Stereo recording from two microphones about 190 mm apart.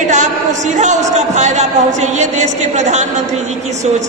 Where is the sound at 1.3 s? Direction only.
40° right (ahead or behind).